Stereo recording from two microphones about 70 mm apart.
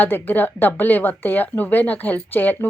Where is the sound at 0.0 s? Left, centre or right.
Left.